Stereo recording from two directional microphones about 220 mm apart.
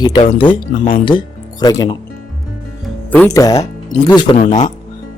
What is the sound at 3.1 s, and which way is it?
Speech, 10° left (ahead or behind).